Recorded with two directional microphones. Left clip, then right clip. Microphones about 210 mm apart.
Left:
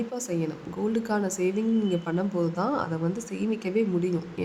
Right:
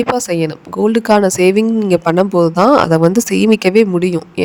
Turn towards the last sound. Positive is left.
turn(degrees=-50)  # may be behind; listen again after turning